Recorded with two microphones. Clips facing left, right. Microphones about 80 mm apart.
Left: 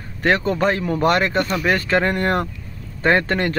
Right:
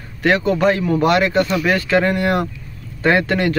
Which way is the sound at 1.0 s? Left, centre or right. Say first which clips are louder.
Right 2 dB; left.